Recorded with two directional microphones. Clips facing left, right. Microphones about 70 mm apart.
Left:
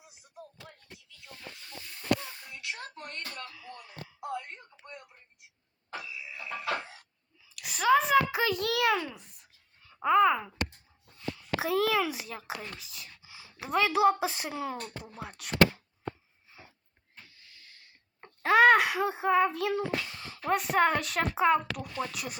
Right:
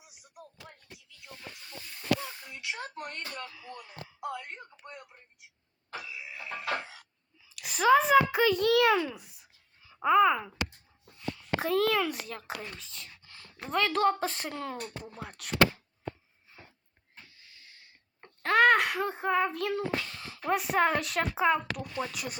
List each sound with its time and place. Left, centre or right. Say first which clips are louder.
2.5 s a sound: right 1 dB; centre
2.9 s speech: right 2 dB; centre
6.0 s music: even; centre
7.5 s a sound: right 2 dB; centre
8.3 s a child's voice: right 5 dB; centre
18.2 s a child's voice: left 2 dB; centre